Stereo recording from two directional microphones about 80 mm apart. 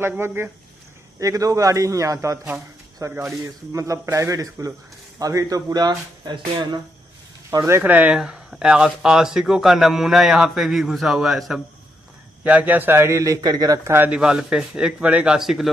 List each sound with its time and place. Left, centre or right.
0.2 s speech: right
1.2 s speech: right
6.3 s speech: right
7.8 s speech: centre
8.2 s speech: centre
12.4 s a man's voice: centre; by 13.7 s right
13.8 s speech: right
14.1 s speech: centre